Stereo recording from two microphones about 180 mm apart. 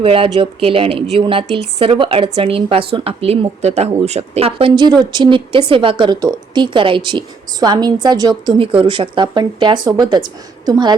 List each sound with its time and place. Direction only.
0.0 s a woman's voice: 30° right (ahead or behind)